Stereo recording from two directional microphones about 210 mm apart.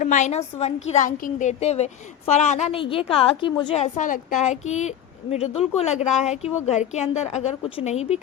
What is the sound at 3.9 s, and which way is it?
A woman's voice, 35° left (ahead or behind).